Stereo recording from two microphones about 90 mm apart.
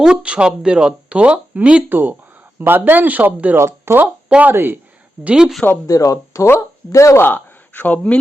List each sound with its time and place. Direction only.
0.0 s speech: 10° right (ahead or behind); by 4.0 s 30° right (ahead or behind)
4.0 s speech: 15° right (ahead or behind)
5.2 s speech: 10° right (ahead or behind)
5.8 s speech: 40° left (ahead or behind)
7.3 s speech: 20° left (ahead or behind)